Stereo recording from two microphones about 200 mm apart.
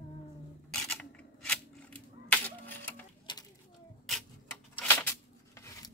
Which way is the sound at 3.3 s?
20° left (ahead or behind).